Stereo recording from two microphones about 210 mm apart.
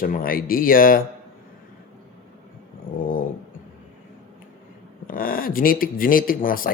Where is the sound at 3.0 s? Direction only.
40° left (ahead or behind).